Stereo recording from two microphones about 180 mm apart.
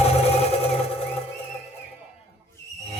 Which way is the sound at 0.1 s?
35° left (ahead or behind).